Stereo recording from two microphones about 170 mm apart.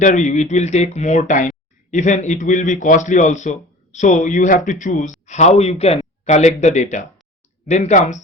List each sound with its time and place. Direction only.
0.0 s a man's voice: 45° left (ahead or behind)